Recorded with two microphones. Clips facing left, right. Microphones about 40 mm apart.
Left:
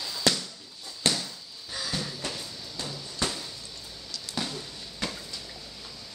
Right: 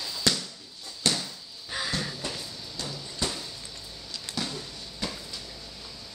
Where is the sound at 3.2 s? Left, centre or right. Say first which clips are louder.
Left 1 dB; left.